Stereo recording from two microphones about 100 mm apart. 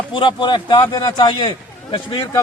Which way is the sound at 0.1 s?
55° left (ahead or behind).